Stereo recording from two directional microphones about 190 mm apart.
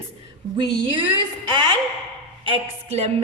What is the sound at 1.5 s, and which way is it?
A woman's voice, 25° right (ahead or behind).